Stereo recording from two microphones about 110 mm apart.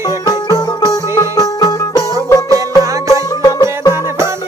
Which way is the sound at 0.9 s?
35° left (ahead or behind).